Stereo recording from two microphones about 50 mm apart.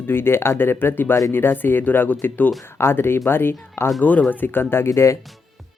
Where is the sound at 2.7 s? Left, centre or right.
Left.